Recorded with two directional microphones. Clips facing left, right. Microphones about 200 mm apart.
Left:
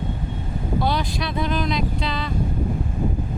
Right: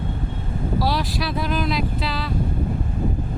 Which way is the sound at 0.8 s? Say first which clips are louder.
Even; centre (ahead or behind).